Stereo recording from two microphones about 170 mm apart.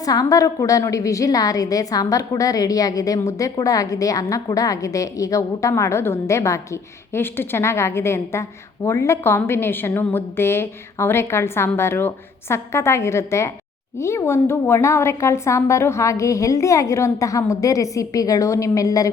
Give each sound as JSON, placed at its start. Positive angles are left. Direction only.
{"t": 0.0, "sound": "a woman's voice", "side_deg": 20}